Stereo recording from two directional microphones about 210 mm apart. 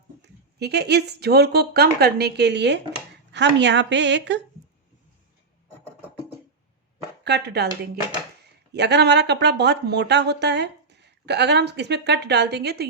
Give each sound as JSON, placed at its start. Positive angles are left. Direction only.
{"t": 0.2, "sound": "speech", "side_deg": -55}
{"t": 7.3, "sound": "speech", "side_deg": -50}
{"t": 8.7, "sound": "speech", "side_deg": -55}